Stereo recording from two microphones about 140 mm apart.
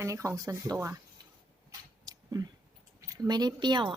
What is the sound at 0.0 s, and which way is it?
Speech, 20° right (ahead or behind).